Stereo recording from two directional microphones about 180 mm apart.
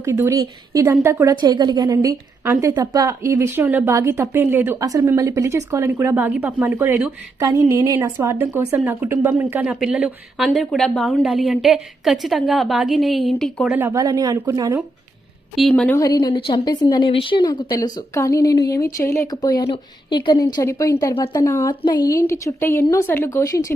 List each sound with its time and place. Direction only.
0.0 s a woman's voice: 15° right (ahead or behind); by 13.7 s centre (ahead or behind)
13.7 s speech: 15° right (ahead or behind)
15.5 s a woman's voice: centre (ahead or behind); by 23.7 s 20° left (ahead or behind)